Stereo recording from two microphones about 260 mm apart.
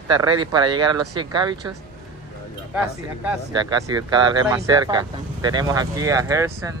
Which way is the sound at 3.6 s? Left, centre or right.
Centre.